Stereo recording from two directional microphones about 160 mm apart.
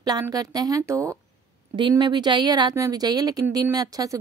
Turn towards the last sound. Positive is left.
turn(degrees=-25)  # may be behind; listen again after turning